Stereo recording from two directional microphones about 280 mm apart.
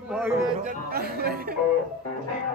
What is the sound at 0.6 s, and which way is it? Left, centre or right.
Chatter, right.